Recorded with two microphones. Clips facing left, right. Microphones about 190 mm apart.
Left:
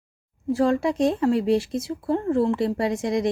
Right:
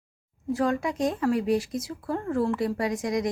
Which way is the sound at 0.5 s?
30° left (ahead or behind).